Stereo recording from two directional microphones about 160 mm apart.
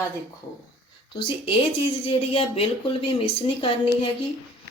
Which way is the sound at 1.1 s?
30° left (ahead or behind).